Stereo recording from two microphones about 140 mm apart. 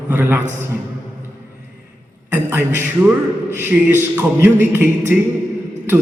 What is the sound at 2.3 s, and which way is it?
Mantra, 15° right (ahead or behind).